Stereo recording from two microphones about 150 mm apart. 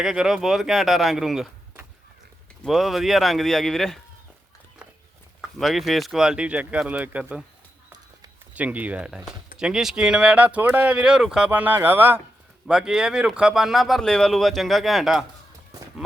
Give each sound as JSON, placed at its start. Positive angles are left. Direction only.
{"t": 0.0, "sound": "speech", "side_deg": 0}
{"t": 2.6, "sound": "speech", "side_deg": 0}
{"t": 5.5, "sound": "speech", "side_deg": 0}
{"t": 8.5, "sound": "speech", "side_deg": -10}